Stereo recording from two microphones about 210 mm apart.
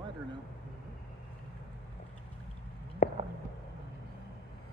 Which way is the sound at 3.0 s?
40° left (ahead or behind).